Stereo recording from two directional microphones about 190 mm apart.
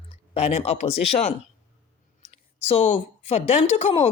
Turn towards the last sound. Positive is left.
turn(degrees=35)  # may be behind; listen again after turning